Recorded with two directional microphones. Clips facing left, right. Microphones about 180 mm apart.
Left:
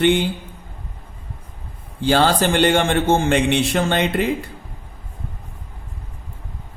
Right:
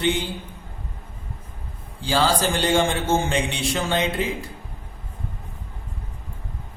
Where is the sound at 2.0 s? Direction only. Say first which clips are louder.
Left 4 dB; 65° left (ahead or behind).